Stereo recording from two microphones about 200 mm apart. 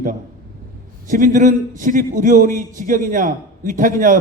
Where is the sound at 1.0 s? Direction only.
40° right (ahead or behind).